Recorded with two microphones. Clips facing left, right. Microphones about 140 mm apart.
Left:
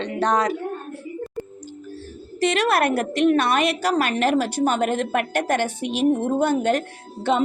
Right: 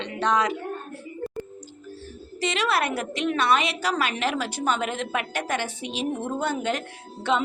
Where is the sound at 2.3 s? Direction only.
50° left (ahead or behind).